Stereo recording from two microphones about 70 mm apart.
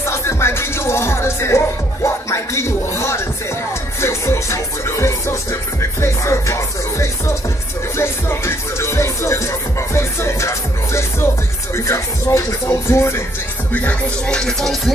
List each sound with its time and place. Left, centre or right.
0.0 s music: left
13.7 s music: centre